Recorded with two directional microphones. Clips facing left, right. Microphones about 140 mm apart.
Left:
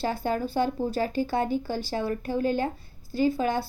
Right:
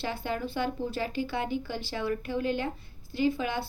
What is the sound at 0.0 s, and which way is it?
Speech, 40° left (ahead or behind).